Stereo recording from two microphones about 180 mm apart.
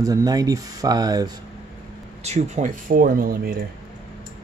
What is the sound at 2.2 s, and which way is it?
Speech, 40° right (ahead or behind).